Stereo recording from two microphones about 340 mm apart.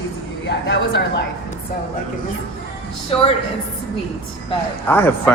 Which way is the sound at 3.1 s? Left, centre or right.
Centre.